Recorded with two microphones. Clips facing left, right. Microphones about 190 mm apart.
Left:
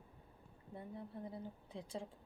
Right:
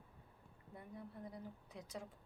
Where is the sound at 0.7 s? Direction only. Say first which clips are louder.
Left 4 dB; 25° left (ahead or behind).